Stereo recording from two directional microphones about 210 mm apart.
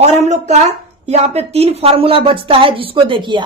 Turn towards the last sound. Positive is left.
turn(degrees=-25)  # may be behind; listen again after turning